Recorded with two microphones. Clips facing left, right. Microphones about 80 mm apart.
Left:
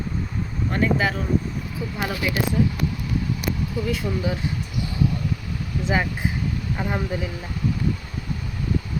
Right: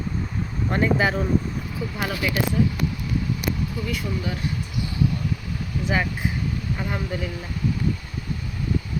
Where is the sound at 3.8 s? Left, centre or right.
Centre.